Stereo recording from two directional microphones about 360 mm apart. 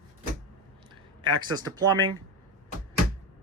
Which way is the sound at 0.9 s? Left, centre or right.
Centre.